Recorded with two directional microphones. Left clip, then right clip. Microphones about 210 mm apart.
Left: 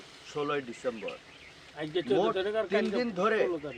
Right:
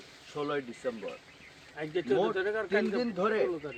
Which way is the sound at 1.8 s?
55° left (ahead or behind).